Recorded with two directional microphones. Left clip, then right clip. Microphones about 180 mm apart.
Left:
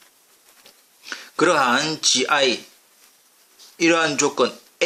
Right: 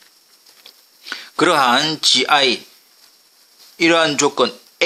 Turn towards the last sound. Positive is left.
turn(degrees=-25)  # may be behind; listen again after turning